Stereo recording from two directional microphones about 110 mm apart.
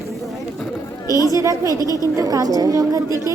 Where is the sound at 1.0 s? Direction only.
30° left (ahead or behind).